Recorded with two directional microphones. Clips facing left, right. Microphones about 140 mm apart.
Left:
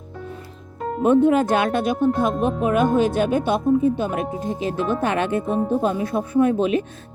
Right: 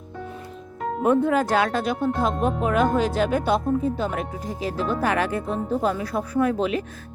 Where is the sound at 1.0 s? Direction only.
20° left (ahead or behind).